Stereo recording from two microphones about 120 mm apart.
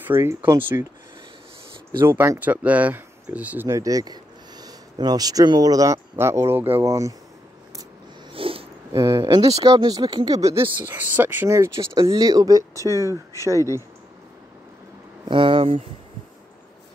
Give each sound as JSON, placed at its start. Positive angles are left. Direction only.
{"t": 0.0, "sound": "speech", "side_deg": -20}
{"t": 2.0, "sound": "speech", "side_deg": -20}
{"t": 3.6, "sound": "speech", "side_deg": -30}
{"t": 8.3, "sound": "a sound", "side_deg": -50}
{"t": 8.9, "sound": "speech", "side_deg": -25}
{"t": 10.9, "sound": "speech", "side_deg": -15}
{"t": 15.2, "sound": "speech", "side_deg": -45}